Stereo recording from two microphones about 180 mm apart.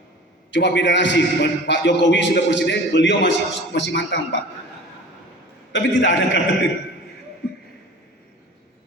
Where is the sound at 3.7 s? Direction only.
75° left (ahead or behind).